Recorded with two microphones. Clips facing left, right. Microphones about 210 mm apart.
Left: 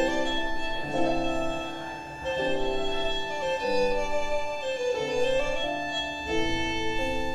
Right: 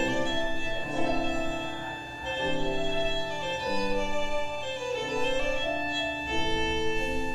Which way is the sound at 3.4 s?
45° left (ahead or behind).